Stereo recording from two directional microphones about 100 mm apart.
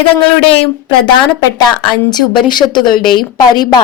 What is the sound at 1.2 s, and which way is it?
A woman's voice, 50° left (ahead or behind).